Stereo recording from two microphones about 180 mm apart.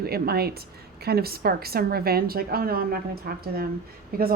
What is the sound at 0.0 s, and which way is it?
A woman's voice, 60° right (ahead or behind).